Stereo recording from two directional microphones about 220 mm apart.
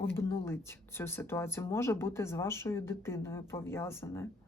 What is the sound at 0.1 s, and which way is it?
Speech, 10° left (ahead or behind).